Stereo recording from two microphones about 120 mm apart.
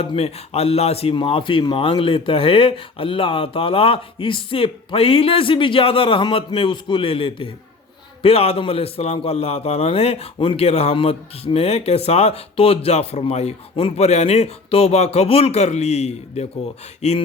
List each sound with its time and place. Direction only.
0.0 s a man's voice: 55° left (ahead or behind)